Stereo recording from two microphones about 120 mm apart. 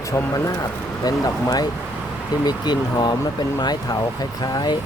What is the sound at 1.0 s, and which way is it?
Speech, 30° left (ahead or behind).